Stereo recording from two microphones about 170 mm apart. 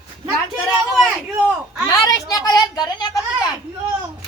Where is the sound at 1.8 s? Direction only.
20° left (ahead or behind).